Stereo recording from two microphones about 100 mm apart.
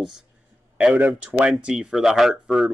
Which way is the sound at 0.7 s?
15° right (ahead or behind).